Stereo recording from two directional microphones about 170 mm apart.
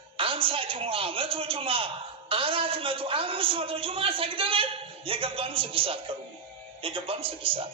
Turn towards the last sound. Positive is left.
turn(degrees=-30)  # may be behind; listen again after turning